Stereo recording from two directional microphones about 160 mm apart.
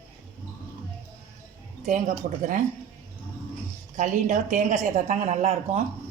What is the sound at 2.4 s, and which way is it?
Speech, 50° right (ahead or behind).